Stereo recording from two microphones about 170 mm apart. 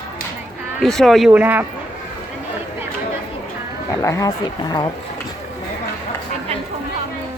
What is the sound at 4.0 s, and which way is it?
Speech, 20° left (ahead or behind).